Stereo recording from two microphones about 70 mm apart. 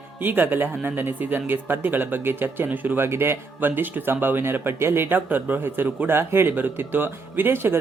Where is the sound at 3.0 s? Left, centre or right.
Right.